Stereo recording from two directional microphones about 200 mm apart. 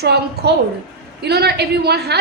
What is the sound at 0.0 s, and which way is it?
A woman's voice, 55° right (ahead or behind).